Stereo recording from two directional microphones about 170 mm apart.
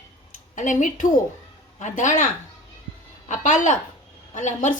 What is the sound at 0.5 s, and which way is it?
A woman's voice, 50° left (ahead or behind).